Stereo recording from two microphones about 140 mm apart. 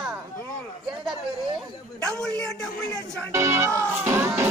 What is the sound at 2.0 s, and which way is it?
A man's voice, 5° left (ahead or behind).